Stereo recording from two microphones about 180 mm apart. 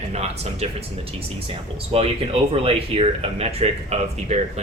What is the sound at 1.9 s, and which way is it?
Speech, 30° right (ahead or behind).